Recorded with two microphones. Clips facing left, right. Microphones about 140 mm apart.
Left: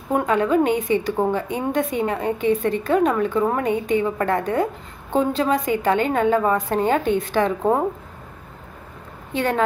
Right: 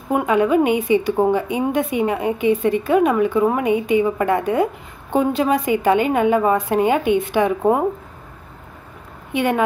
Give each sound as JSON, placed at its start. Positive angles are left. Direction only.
{"t": 0.1, "sound": "a woman's voice", "side_deg": -10}
{"t": 9.3, "sound": "speech", "side_deg": -15}